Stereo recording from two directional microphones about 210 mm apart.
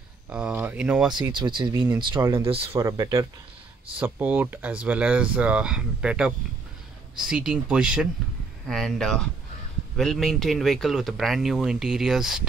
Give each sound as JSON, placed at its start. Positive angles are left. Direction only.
{"t": 0.3, "sound": "speech", "side_deg": -5}
{"t": 1.3, "sound": "speech", "side_deg": -20}
{"t": 2.8, "sound": "speech", "side_deg": -15}